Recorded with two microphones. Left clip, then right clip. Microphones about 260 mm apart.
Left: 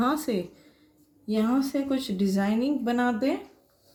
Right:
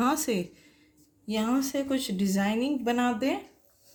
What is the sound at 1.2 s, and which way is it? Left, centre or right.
Speech, right.